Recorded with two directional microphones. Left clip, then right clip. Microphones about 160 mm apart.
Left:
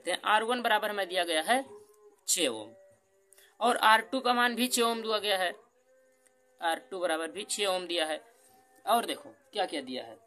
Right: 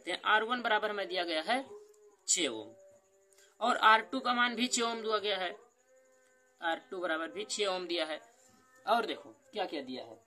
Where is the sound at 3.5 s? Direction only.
30° left (ahead or behind).